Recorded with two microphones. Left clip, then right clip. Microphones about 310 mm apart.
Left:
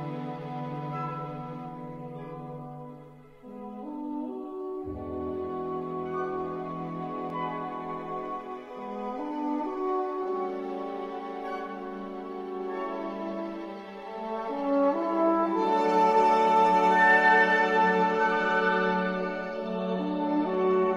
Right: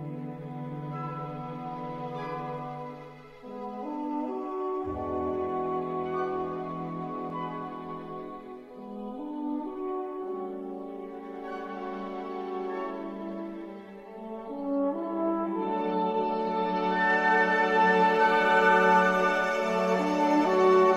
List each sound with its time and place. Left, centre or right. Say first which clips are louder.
5.1 s music: right 3 dB; right; by 6.5 s centre
9.4 s music: left 3 dB; left
12.5 s music: left 2 dB; centre
14.6 s music: left 4 dB; left
16.2 s music: left 7 dB; left; by 19.8 s right
19.8 s music: right 3 dB; right